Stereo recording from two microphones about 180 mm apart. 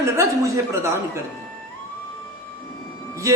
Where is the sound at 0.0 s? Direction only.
15° right (ahead or behind).